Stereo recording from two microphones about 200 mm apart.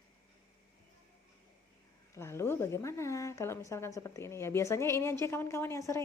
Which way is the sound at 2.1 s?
15° left (ahead or behind).